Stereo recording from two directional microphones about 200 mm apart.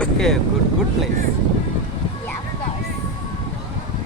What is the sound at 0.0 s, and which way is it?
Boat, 5° left (ahead or behind).